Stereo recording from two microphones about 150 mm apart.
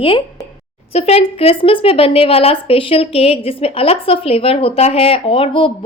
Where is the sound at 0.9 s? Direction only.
45° left (ahead or behind).